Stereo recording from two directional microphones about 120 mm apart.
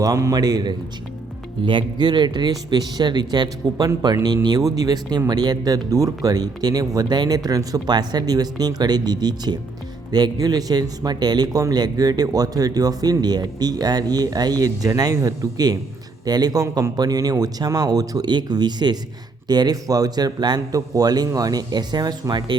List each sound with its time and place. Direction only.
0.0 s speech: 30° right (ahead or behind)